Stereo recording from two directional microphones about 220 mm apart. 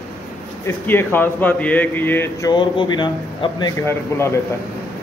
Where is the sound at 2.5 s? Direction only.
20° left (ahead or behind).